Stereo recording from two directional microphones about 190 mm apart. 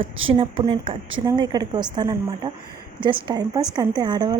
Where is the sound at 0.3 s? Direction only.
30° right (ahead or behind).